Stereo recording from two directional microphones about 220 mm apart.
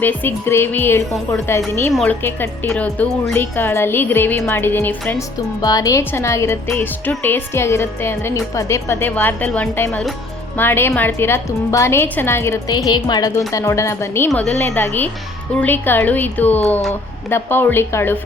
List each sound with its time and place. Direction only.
0.0 s speech: 10° left (ahead or behind)